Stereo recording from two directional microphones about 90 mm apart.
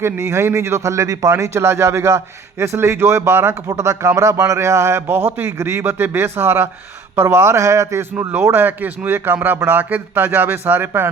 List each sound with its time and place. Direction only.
0.0 s speech: 30° right (ahead or behind)